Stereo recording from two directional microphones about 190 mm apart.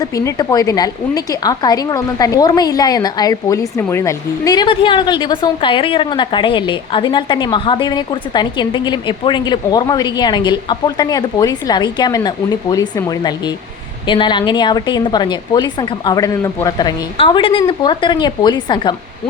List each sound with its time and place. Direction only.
0.0 s a woman's voice: 20° left (ahead or behind)